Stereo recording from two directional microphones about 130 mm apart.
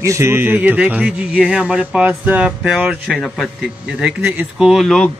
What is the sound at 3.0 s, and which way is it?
A man's voice, centre (ahead or behind).